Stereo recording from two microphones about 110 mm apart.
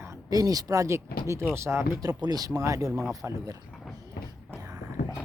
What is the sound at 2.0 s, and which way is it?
Speech, 35° right (ahead or behind).